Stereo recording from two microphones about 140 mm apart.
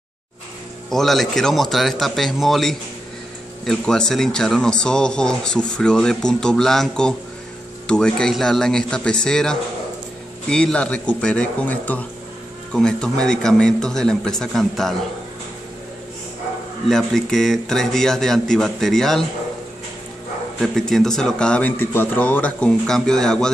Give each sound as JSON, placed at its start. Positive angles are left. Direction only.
{"t": 0.8, "sound": "speech", "side_deg": 0}
{"t": 16.9, "sound": "speech", "side_deg": 5}
{"t": 20.6, "sound": "speech", "side_deg": 5}